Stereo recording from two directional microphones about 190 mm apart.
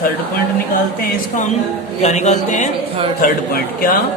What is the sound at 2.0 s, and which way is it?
A man's voice, 35° left (ahead or behind).